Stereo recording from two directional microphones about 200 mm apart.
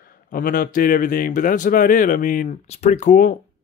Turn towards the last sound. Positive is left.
turn(degrees=40)  # may be behind; listen again after turning